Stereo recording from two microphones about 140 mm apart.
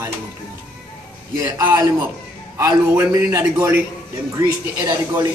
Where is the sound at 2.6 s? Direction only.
20° right (ahead or behind).